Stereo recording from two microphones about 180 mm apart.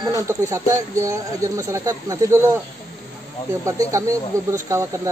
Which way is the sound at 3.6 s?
15° right (ahead or behind).